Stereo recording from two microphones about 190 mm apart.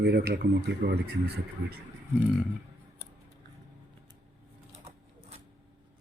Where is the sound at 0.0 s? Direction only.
60° right (ahead or behind).